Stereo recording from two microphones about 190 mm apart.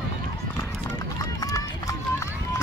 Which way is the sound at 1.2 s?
20° left (ahead or behind).